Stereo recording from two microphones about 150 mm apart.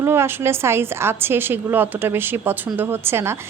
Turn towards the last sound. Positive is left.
turn(degrees=-15)  # may be behind; listen again after turning